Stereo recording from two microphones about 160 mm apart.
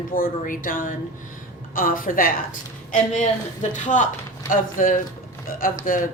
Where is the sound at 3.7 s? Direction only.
50° left (ahead or behind).